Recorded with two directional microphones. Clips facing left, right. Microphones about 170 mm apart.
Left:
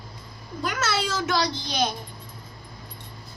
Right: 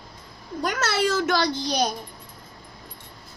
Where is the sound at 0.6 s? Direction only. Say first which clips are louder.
Right 3 dB; 55° right (ahead or behind).